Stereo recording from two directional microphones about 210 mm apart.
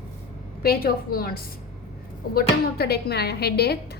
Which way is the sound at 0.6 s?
45° left (ahead or behind).